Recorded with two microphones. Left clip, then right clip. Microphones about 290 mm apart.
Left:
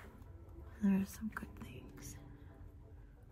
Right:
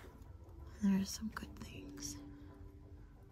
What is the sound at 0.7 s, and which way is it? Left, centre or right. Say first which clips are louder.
Speech: even; centre.